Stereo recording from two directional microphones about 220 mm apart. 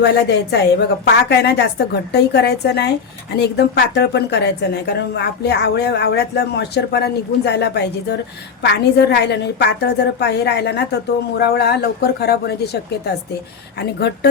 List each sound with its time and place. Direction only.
0.0 s a woman's voice: 50° left (ahead or behind)